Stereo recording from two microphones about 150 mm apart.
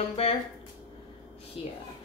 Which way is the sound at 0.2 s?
40° left (ahead or behind).